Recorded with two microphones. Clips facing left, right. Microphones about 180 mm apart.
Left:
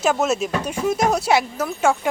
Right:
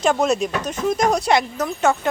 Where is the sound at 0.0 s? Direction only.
5° left (ahead or behind).